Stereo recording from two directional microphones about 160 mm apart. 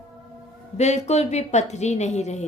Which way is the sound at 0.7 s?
45° left (ahead or behind).